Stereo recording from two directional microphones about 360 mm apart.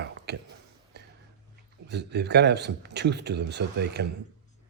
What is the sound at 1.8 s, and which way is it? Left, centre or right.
A man's voice, right.